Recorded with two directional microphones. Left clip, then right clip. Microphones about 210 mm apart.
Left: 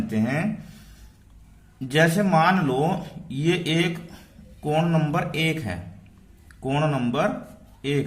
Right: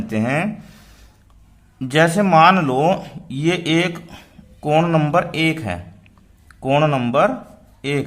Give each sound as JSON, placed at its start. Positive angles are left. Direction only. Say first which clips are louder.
{"t": 0.1, "sound": "a man's voice", "louder": "right 8 dB", "side_deg": -25}
{"t": 1.8, "sound": "a man's voice", "louder": "right 5 dB", "side_deg": -30}